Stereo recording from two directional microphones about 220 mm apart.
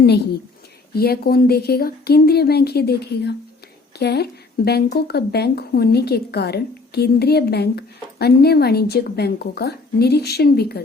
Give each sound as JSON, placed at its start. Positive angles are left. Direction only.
{"t": 0.9, "sound": "speech", "side_deg": 45}